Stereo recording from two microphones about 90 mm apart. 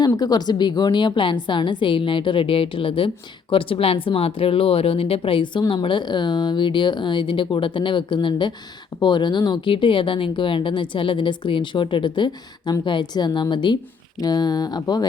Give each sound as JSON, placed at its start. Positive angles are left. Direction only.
{"t": 0.2, "sound": "speech", "side_deg": 50}
{"t": 14.2, "sound": "speech", "side_deg": 45}